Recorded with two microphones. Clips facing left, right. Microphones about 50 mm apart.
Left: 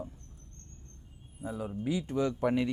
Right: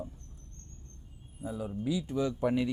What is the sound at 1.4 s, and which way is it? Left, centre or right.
Speech, left.